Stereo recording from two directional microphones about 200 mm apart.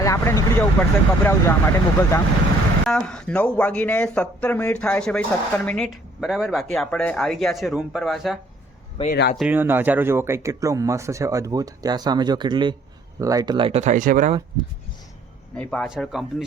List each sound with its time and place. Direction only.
0.0 s speech: 15° left (ahead or behind); by 8.4 s centre (ahead or behind)
9.0 s speech: 30° left (ahead or behind)
9.4 s speech: 10° right (ahead or behind); by 14.3 s 40° right (ahead or behind)
15.5 s speech: 5° left (ahead or behind)